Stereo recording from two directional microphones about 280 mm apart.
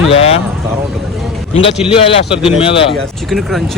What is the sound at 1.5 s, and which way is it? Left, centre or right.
Speech, centre.